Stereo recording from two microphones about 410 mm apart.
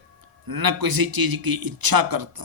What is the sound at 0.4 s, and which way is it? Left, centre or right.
A man's voice, right.